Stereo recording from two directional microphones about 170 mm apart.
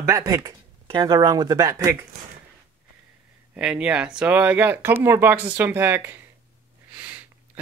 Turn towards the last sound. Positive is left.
turn(degrees=-10)  # may be behind; listen again after turning